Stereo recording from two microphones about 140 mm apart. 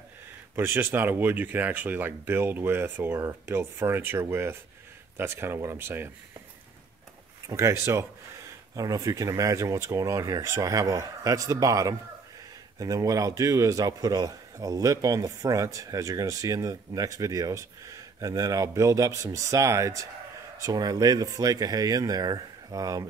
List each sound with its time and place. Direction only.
0.6 s speech: 15° right (ahead or behind)
7.4 s a man's voice: 20° right (ahead or behind)